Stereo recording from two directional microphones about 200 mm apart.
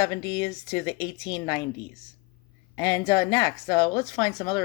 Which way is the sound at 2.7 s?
20° left (ahead or behind).